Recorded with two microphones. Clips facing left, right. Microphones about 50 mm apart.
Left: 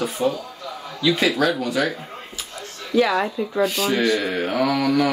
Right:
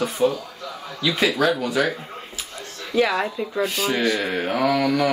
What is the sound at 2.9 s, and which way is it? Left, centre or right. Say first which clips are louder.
Speech: left 1 dB; right.